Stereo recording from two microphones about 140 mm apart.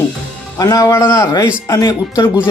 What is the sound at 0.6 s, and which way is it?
Speech, 25° left (ahead or behind).